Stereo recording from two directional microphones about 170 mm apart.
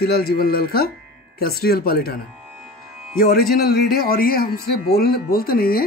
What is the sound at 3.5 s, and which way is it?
Speech, 65° left (ahead or behind).